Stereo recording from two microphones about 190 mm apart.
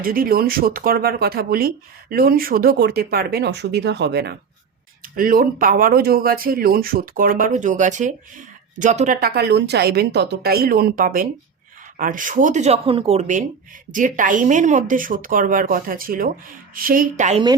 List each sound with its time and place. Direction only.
0.0 s speech: 50° right (ahead or behind)
5.0 s speech: 50° right (ahead or behind)
9.2 s speech: 60° right (ahead or behind); by 17.4 s 40° right (ahead or behind)